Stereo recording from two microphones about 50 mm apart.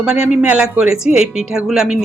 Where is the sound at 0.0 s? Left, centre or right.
Centre.